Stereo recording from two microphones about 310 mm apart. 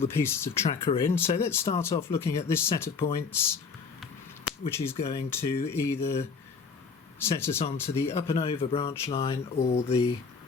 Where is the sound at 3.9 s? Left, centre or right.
Centre.